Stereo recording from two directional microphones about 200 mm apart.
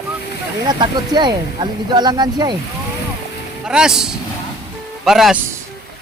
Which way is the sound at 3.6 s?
5° right (ahead or behind).